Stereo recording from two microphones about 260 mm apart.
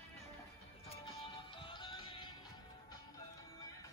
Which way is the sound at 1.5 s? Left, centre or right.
Centre.